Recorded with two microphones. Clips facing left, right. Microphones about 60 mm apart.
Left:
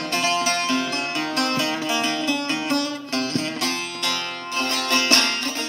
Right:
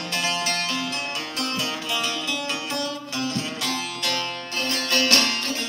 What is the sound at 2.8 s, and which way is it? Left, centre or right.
Music, left.